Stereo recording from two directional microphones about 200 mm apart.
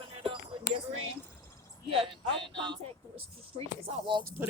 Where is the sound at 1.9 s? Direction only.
25° right (ahead or behind).